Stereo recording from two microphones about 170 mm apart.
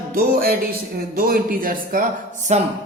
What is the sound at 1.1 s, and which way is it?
Speech, 55° right (ahead or behind).